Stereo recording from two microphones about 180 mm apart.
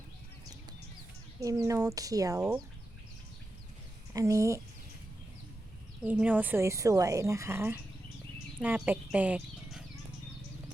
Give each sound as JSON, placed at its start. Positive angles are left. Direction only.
{"t": 1.4, "sound": "speech", "side_deg": -20}
{"t": 4.1, "sound": "speech", "side_deg": -15}
{"t": 6.0, "sound": "speech", "side_deg": -5}